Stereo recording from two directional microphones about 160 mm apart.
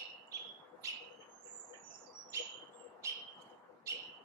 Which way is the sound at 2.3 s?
20° right (ahead or behind).